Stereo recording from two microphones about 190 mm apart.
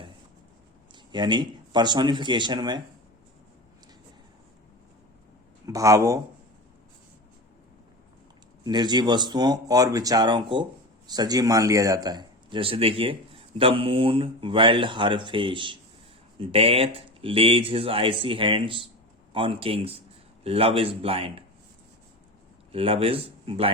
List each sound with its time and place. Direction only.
1.1 s speech: 25° right (ahead or behind)
5.6 s speech: 15° right (ahead or behind)
8.6 s speech: 20° right (ahead or behind)
22.7 s speech: 30° right (ahead or behind)